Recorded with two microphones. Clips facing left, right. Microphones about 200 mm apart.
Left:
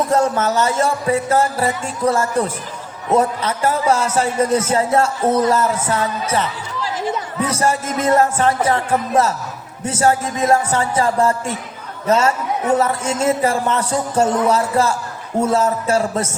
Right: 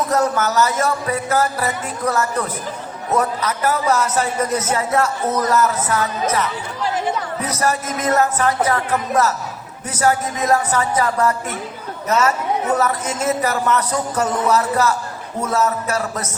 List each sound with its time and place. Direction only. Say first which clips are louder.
0.1 s a man's voice: left 2 dB; 25° left (ahead or behind)